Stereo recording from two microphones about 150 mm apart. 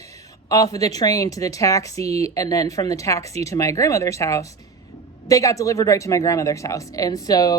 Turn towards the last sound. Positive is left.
turn(degrees=25)  # may be behind; listen again after turning